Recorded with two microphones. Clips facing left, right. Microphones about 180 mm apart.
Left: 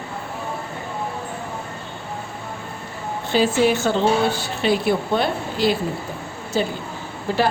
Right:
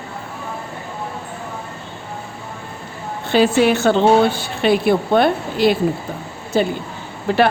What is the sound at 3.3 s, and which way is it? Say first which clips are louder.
A woman's voice: right 4 dB; 65° right (ahead or behind).